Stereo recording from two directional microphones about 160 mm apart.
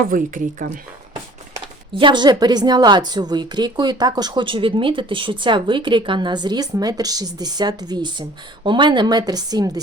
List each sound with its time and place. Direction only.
0.1 s speech: 60° right (ahead or behind)
2.0 s speech: 30° right (ahead or behind)